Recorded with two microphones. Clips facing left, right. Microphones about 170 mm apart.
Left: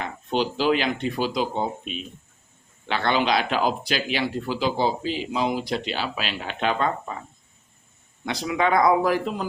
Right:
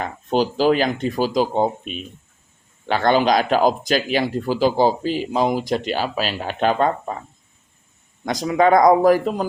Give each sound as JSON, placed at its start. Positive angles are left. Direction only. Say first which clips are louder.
{"t": 0.0, "sound": "speech", "louder": "right 5 dB", "side_deg": -45}
{"t": 8.2, "sound": "speech", "louder": "right 7 dB", "side_deg": -45}